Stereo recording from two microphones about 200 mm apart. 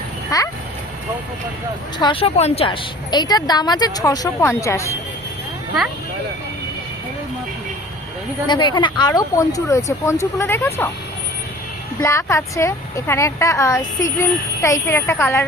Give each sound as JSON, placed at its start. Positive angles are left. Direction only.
{"t": 0.3, "sound": "a woman's voice", "side_deg": 20}
{"t": 2.0, "sound": "a woman's voice", "side_deg": 25}
{"t": 8.4, "sound": "a woman's voice", "side_deg": 20}
{"t": 11.9, "sound": "a woman's voice", "side_deg": 15}